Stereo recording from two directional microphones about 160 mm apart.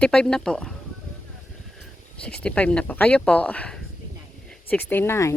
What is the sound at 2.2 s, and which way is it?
Speech, 5° left (ahead or behind).